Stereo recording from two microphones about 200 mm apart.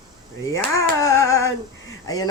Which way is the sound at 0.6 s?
10° left (ahead or behind).